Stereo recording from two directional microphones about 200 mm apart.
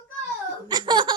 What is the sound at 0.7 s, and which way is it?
Laughter, 20° right (ahead or behind).